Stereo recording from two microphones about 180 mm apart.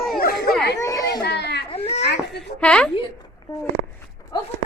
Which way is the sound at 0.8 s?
15° left (ahead or behind).